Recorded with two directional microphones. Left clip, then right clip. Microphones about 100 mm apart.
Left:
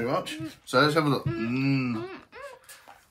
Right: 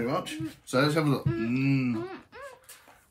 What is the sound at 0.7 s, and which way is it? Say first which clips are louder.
Speech: left 3 dB; 35° left (ahead or behind).